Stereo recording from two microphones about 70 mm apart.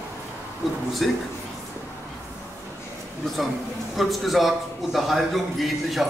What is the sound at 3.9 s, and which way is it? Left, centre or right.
A man's voice, centre.